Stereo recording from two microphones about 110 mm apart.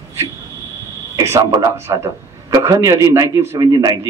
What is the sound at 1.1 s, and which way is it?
A man's voice, 25° right (ahead or behind).